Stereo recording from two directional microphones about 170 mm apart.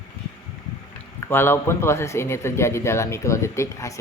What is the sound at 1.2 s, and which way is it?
Speech, 15° left (ahead or behind).